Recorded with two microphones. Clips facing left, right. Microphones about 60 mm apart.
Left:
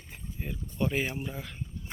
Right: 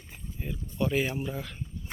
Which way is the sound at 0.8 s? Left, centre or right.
Left.